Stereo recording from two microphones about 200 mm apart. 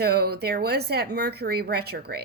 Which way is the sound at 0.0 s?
50° right (ahead or behind).